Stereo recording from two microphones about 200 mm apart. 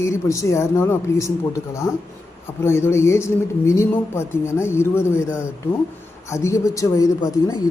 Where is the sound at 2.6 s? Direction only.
15° left (ahead or behind).